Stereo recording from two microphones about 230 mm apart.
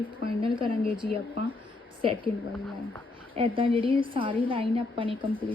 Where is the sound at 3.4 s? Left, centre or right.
Right.